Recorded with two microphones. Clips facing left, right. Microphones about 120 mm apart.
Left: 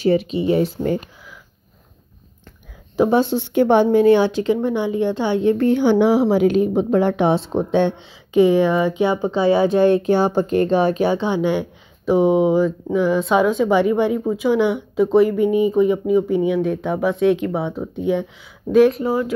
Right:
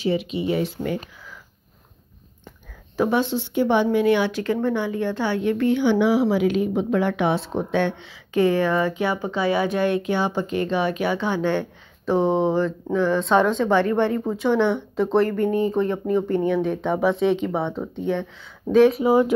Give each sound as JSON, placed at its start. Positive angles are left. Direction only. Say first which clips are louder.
{"t": 0.0, "sound": "speech", "louder": "left 6 dB", "side_deg": 40}
{"t": 3.1, "sound": "speech", "louder": "left 4 dB", "side_deg": 35}
{"t": 3.3, "sound": "a woman's voice", "louder": "left 5 dB", "side_deg": 50}